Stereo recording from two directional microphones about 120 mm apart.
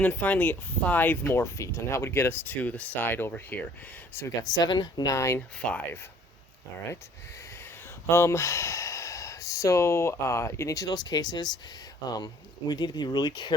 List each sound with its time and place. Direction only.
0.0 s speech: 15° left (ahead or behind)
4.5 s speech: 35° left (ahead or behind)
8.1 s speech: 25° left (ahead or behind)